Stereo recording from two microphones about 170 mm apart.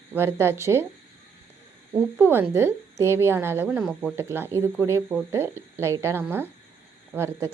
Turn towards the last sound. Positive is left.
turn(degrees=-15)  # may be behind; listen again after turning